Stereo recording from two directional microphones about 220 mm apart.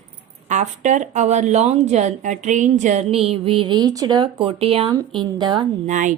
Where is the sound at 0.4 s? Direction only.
35° right (ahead or behind).